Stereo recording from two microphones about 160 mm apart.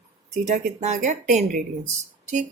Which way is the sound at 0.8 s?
50° right (ahead or behind).